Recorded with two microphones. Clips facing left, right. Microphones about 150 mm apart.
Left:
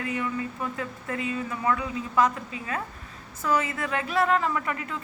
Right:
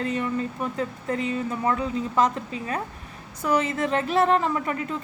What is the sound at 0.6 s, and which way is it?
A woman's voice, 25° right (ahead or behind).